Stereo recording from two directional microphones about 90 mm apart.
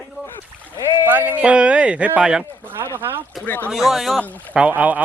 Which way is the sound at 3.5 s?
20° left (ahead or behind).